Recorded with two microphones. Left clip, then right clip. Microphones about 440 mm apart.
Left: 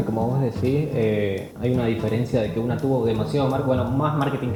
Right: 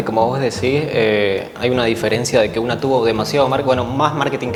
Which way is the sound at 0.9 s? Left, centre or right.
Centre.